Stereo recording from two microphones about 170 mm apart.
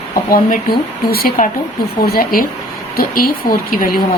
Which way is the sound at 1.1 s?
60° left (ahead or behind).